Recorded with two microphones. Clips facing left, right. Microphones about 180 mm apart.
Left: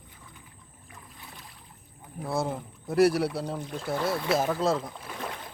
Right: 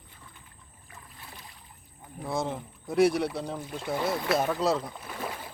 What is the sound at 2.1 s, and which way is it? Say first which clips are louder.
Speech: left 1 dB; 5° left (ahead or behind).